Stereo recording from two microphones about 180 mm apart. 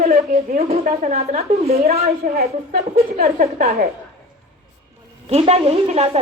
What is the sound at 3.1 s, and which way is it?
Speech, 50° right (ahead or behind).